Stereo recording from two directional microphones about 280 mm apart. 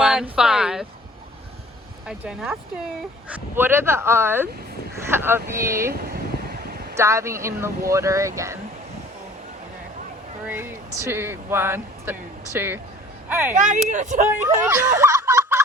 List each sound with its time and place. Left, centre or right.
0.0 s speech: centre
2.0 s speech: centre
5.9 s a sound: right
6.9 s speech: centre
10.4 s speech: centre
13.6 s speech: right
14.7 s speech: centre